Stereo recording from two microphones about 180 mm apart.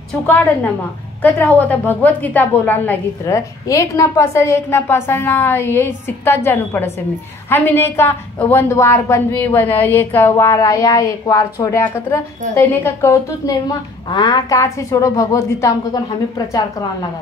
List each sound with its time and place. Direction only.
0.1 s a woman's voice: 10° left (ahead or behind)